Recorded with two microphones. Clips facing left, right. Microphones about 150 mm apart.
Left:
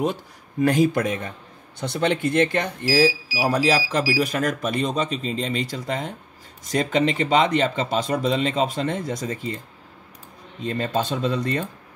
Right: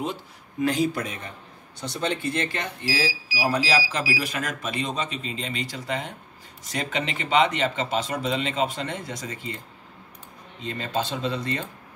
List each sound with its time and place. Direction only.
0.0 s speech: 50° left (ahead or behind)
10.6 s speech: 50° left (ahead or behind)